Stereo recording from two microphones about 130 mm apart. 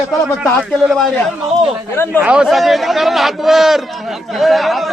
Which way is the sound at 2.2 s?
5° right (ahead or behind).